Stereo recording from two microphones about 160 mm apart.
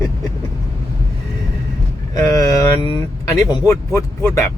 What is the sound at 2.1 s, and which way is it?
Vehicle, 20° left (ahead or behind).